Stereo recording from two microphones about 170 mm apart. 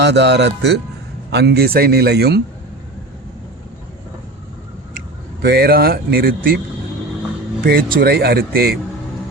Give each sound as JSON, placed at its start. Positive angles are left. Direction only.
{"t": 0.0, "sound": "speech", "side_deg": -85}
{"t": 1.3, "sound": "speech", "side_deg": -75}
{"t": 4.9, "sound": "speech", "side_deg": -70}
{"t": 7.6, "sound": "speech", "side_deg": -55}
{"t": 7.9, "sound": "speech", "side_deg": -70}